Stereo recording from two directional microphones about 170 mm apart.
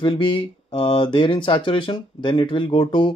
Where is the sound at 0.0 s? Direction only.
30° left (ahead or behind).